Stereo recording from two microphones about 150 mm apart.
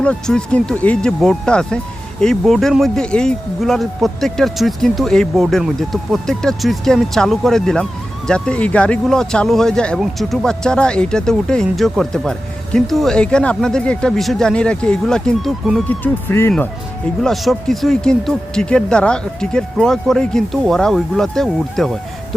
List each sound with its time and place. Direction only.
0.0 s speech: 5° left (ahead or behind)
15.9 s speech: 15° left (ahead or behind)
17.2 s speech: centre (ahead or behind)